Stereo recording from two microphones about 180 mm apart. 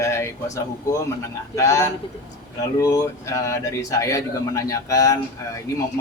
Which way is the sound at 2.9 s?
15° left (ahead or behind).